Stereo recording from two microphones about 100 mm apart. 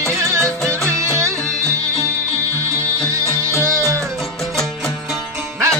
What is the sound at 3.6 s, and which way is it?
Music, 35° right (ahead or behind).